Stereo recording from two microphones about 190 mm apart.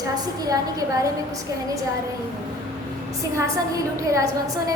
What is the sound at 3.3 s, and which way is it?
Speech, 15° right (ahead or behind).